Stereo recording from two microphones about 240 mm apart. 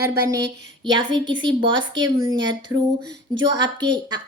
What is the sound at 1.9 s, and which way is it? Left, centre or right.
A woman's voice, right.